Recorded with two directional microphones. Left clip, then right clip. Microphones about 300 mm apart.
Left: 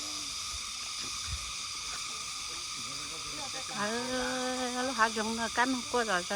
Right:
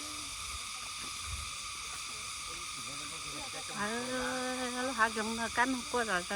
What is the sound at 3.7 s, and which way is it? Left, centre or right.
Speech, centre.